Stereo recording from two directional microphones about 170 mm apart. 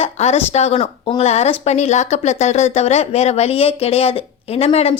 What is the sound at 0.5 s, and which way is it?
A woman's voice, 35° left (ahead or behind).